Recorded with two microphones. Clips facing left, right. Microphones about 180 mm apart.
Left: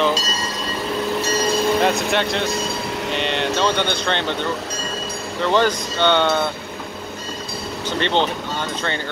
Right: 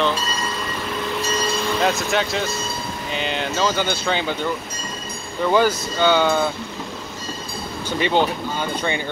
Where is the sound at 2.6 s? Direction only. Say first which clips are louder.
Left 4 dB; 70° left (ahead or behind).